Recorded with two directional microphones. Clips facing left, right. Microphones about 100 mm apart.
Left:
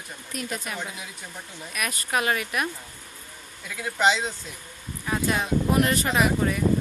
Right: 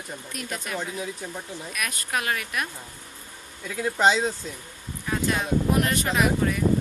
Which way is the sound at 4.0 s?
40° right (ahead or behind).